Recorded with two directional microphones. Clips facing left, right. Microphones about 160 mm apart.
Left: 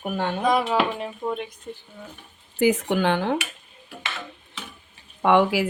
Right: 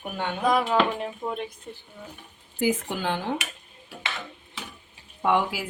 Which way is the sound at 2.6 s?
70° left (ahead or behind).